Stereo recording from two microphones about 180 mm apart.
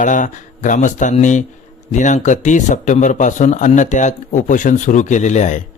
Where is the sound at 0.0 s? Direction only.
45° left (ahead or behind).